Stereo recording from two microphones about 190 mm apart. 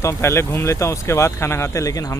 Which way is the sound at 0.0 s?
15° left (ahead or behind).